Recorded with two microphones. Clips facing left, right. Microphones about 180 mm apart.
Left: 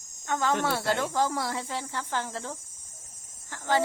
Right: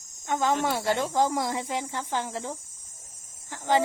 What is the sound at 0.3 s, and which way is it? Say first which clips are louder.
Speech: right 1 dB; 15° right (ahead or behind).